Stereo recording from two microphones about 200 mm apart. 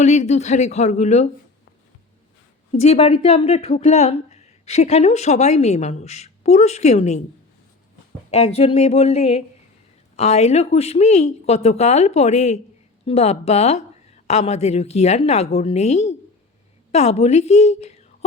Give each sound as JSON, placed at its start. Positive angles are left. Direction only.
{"t": 0.0, "sound": "speech", "side_deg": 35}
{"t": 2.7, "sound": "speech", "side_deg": 35}
{"t": 8.3, "sound": "speech", "side_deg": 30}